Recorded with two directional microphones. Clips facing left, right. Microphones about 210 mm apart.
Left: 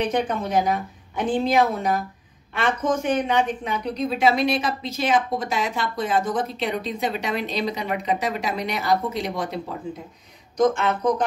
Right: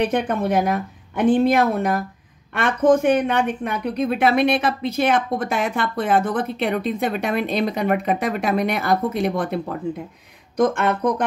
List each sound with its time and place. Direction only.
0.1 s a woman's voice: 60° right (ahead or behind)